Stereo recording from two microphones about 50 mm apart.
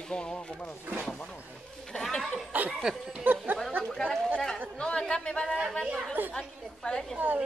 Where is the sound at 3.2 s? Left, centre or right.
Right.